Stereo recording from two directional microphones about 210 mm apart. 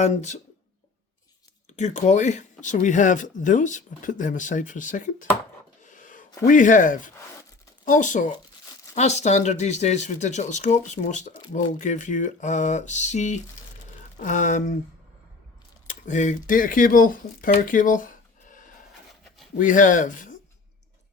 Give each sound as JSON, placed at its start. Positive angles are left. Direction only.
{"t": 0.0, "sound": "speech", "side_deg": 35}
{"t": 1.7, "sound": "speech", "side_deg": 35}
{"t": 5.8, "sound": "a sound", "side_deg": 40}
{"t": 6.4, "sound": "speech", "side_deg": 35}
{"t": 15.9, "sound": "speech", "side_deg": 35}